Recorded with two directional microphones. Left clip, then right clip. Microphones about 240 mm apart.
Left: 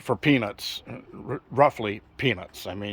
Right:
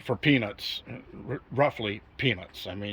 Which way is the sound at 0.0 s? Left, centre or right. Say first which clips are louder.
Left 2 dB; centre.